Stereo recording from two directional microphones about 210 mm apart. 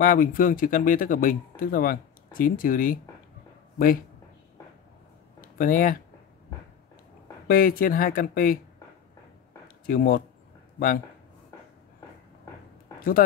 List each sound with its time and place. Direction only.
0.0 s speech: 40° left (ahead or behind)
5.6 s speech: 40° left (ahead or behind)
7.4 s speech: 45° left (ahead or behind)
9.8 s speech: 45° left (ahead or behind)